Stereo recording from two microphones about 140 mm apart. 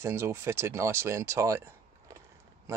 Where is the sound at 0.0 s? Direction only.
20° right (ahead or behind).